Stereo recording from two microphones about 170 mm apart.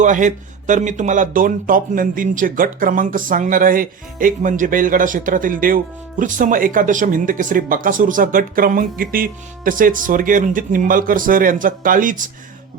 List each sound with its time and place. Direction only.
0.0 s speech: 45° right (ahead or behind)